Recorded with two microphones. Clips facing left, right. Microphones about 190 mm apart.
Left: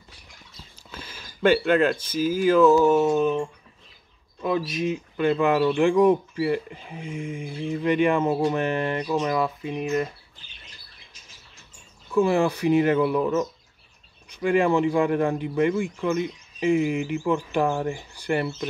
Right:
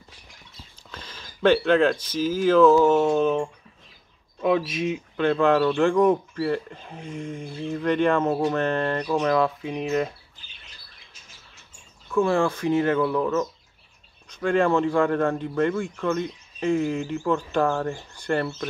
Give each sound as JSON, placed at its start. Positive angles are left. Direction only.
{"t": 0.9, "sound": "speech", "side_deg": 10}
{"t": 12.1, "sound": "speech", "side_deg": 15}